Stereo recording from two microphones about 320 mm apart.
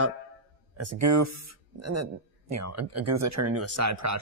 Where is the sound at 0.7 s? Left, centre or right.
Right.